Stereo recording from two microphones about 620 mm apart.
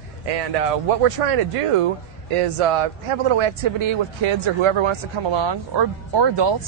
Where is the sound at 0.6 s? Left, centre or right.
Right.